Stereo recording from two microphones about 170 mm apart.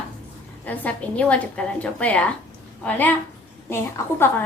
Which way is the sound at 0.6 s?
10° left (ahead or behind).